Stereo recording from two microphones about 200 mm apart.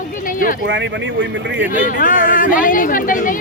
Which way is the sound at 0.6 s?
60° right (ahead or behind).